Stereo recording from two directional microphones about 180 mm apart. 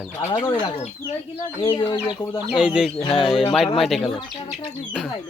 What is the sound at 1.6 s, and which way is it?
Speech, 25° left (ahead or behind).